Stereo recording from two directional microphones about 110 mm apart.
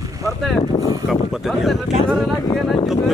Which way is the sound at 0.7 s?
35° left (ahead or behind).